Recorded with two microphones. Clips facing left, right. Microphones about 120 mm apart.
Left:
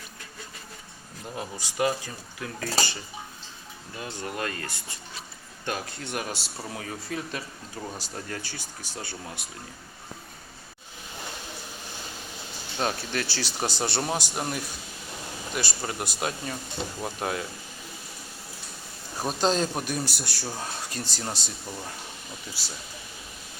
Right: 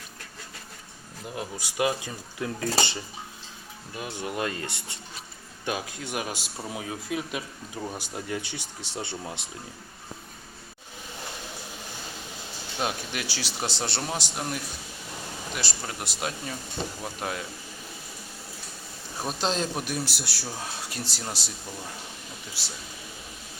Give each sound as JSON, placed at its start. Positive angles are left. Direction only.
{"t": 1.4, "sound": "speech", "side_deg": -10}
{"t": 2.4, "sound": "speech", "side_deg": -25}
{"t": 5.6, "sound": "speech", "side_deg": -10}
{"t": 12.8, "sound": "speech", "side_deg": -10}
{"t": 13.6, "sound": "speech", "side_deg": 0}
{"t": 19.2, "sound": "speech", "side_deg": 0}